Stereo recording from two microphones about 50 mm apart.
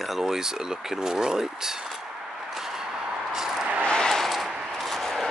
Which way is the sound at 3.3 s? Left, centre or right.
Centre.